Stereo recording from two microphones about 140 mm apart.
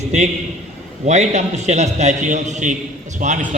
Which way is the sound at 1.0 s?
55° right (ahead or behind).